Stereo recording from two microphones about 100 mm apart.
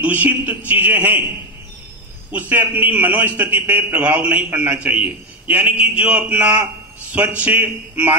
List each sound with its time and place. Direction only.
0.0 s a man's voice: 15° right (ahead or behind)
2.3 s a man's voice: 15° right (ahead or behind)